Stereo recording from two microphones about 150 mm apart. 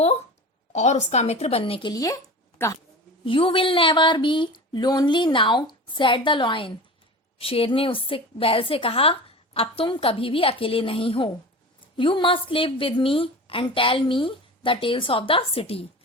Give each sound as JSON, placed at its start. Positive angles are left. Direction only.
{"t": 0.7, "sound": "a woman's voice", "side_deg": 50}
{"t": 1.9, "sound": "speech", "side_deg": 25}
{"t": 3.2, "sound": "a woman's voice", "side_deg": 35}